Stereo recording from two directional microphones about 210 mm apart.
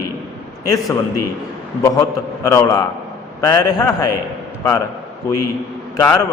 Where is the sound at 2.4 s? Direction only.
15° left (ahead or behind).